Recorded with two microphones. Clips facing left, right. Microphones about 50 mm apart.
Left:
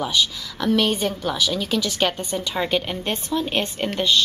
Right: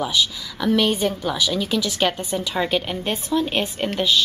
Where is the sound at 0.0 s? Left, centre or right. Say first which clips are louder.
Even; centre.